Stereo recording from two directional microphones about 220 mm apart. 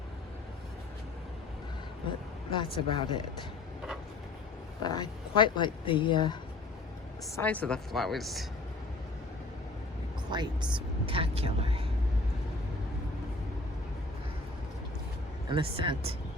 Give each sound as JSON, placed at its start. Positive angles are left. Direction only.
{"t": 2.5, "sound": "speech", "side_deg": 20}
{"t": 4.8, "sound": "speech", "side_deg": 20}
{"t": 7.3, "sound": "speech", "side_deg": 5}
{"t": 10.2, "sound": "speech", "side_deg": -20}
{"t": 15.4, "sound": "speech", "side_deg": -20}